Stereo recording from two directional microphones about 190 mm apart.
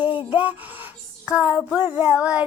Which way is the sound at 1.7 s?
5° right (ahead or behind).